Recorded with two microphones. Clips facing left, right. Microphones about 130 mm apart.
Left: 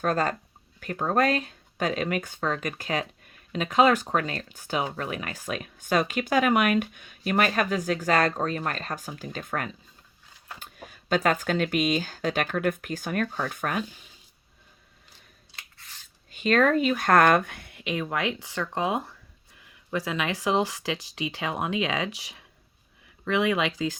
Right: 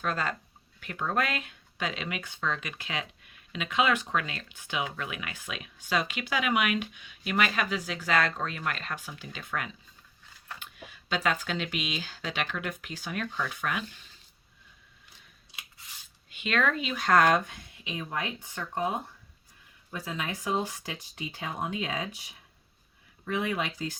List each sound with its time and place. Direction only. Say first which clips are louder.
0.0 s speech: left 6 dB; 45° left (ahead or behind)
16.3 s speech: left 7 dB; 40° left (ahead or behind); by 23.9 s 90° left